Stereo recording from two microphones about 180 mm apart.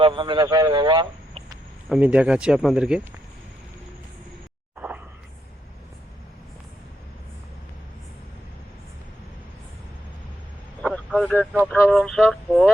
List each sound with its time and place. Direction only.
0.0 s speech: 25° right (ahead or behind)
1.9 s speech: 5° right (ahead or behind)
10.8 s vehicle: 5° left (ahead or behind)
11.8 s speech: centre (ahead or behind)